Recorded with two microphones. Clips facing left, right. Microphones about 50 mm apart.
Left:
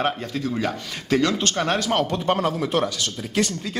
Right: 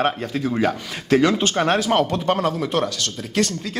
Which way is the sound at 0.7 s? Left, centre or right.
Centre.